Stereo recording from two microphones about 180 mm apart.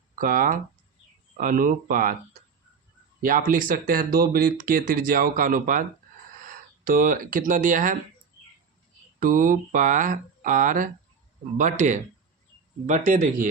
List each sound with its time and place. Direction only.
0.2 s speech: 50° right (ahead or behind)
3.2 s speech: 50° right (ahead or behind)
9.2 s speech: 50° right (ahead or behind)